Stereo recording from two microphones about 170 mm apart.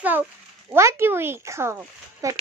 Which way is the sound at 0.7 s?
15° right (ahead or behind).